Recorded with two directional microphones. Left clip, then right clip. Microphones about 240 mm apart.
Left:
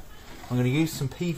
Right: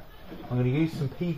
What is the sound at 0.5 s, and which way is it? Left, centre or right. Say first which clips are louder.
Speech: left 2 dB; left.